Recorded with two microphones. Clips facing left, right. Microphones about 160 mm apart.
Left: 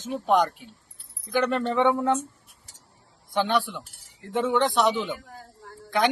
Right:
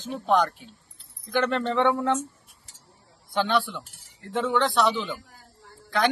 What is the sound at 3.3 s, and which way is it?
A man's voice, 15° left (ahead or behind).